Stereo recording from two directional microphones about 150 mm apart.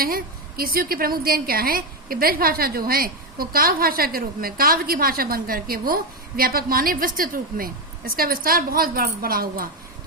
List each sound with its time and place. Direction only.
0.0 s a woman's voice: 75° right (ahead or behind)